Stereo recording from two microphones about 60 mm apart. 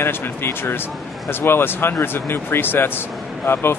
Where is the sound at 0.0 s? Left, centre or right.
Left.